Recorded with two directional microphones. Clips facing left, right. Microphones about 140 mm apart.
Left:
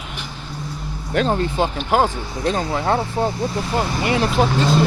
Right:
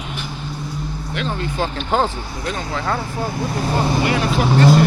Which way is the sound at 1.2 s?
45° left (ahead or behind).